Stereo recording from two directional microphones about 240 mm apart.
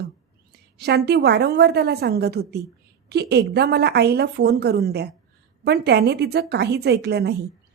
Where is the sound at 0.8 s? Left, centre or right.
Right.